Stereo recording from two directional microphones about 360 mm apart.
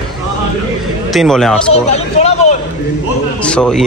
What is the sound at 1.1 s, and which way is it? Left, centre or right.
Speech, centre.